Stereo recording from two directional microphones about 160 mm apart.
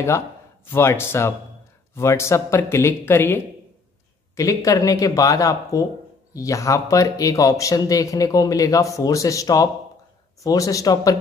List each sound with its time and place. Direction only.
0.7 s speech: 15° left (ahead or behind)
4.4 s speech: 20° left (ahead or behind)